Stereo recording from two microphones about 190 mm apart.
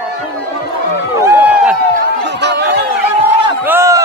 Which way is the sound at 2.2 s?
65° right (ahead or behind).